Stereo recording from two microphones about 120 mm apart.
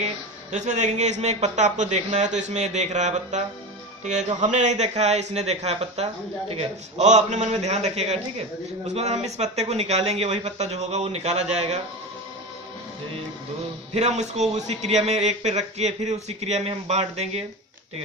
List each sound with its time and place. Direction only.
0.0 s speech: 85° right; by 11.8 s 70° right (ahead or behind)
13.9 s speech: 65° right (ahead or behind)